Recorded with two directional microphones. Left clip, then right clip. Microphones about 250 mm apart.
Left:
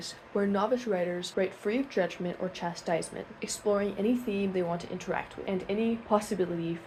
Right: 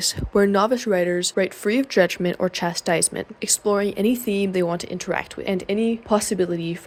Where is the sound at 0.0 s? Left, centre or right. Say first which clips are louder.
Right 12 dB; right.